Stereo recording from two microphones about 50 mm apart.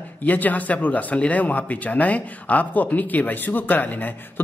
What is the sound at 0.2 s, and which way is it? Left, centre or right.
Speech, left.